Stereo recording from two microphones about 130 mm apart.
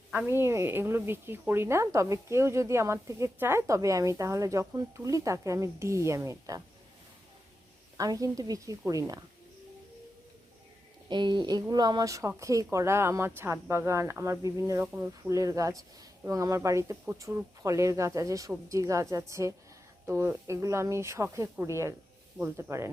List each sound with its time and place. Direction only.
0.1 s a woman's voice: 15° right (ahead or behind)
7.9 s a woman's voice: 25° right (ahead or behind)
11.1 s a woman's voice: 35° right (ahead or behind); by 22.9 s 20° right (ahead or behind)